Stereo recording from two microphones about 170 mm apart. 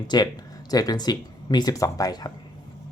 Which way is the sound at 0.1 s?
25° left (ahead or behind).